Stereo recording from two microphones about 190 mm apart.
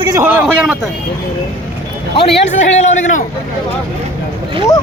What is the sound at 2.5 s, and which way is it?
Speech, 35° left (ahead or behind).